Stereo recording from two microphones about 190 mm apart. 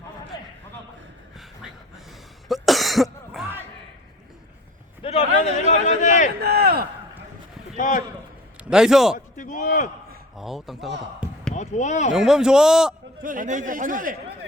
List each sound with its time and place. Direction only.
2.5 s cough: centre (ahead or behind)
5.0 s a sound: 30° left (ahead or behind)
6.4 s a sound: 55° right (ahead or behind)
7.8 s a man's voice: 45° left (ahead or behind)
8.7 s a man's voice: 5° right (ahead or behind)
9.1 s a sound: 45° left (ahead or behind)
10.3 s a man's voice: centre (ahead or behind)
11.5 s speech: 40° left (ahead or behind)
12.1 s a man's voice: 5° right (ahead or behind)
13.2 s speech: 45° right (ahead or behind)